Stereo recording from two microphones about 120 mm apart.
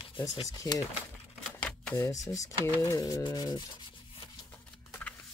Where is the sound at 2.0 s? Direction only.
25° left (ahead or behind).